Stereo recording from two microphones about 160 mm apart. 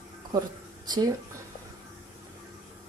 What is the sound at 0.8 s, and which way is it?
Speech, 25° right (ahead or behind).